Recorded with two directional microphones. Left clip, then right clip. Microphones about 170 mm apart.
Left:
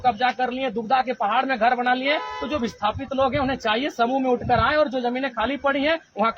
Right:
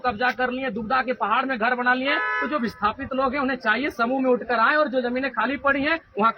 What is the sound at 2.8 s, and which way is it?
A woman's voice, 30° left (ahead or behind).